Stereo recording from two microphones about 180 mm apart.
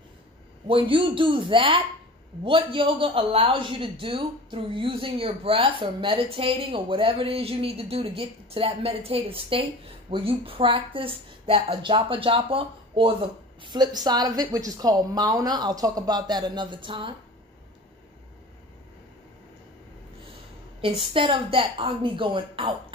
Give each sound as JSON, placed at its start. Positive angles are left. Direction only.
{"t": 0.7, "sound": "a man's voice", "side_deg": -30}
{"t": 21.0, "sound": "a man's voice", "side_deg": -30}